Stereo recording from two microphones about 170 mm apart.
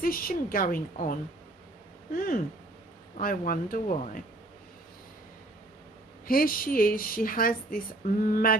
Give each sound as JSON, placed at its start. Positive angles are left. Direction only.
{"t": 0.0, "sound": "speech", "side_deg": 60}
{"t": 2.1, "sound": "speech", "side_deg": 60}
{"t": 6.2, "sound": "speech", "side_deg": 55}